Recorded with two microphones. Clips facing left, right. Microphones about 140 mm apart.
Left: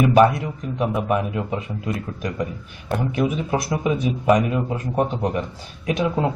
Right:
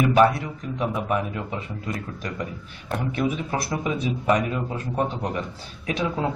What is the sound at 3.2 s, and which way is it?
Speech, 15° left (ahead or behind).